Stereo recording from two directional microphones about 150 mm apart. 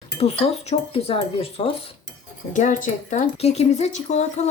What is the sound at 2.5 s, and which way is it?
Speech, 55° left (ahead or behind).